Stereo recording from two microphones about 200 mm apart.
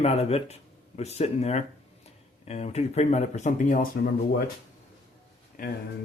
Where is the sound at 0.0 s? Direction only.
30° left (ahead or behind).